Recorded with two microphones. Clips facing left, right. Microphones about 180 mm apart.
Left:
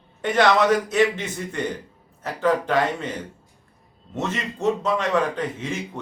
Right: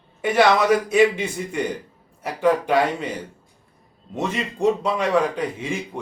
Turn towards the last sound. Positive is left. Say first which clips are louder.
# right 1 dB
turn(degrees=-10)  # may be behind; listen again after turning